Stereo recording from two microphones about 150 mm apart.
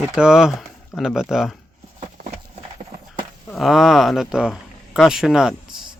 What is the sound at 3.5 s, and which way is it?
Speech, centre (ahead or behind).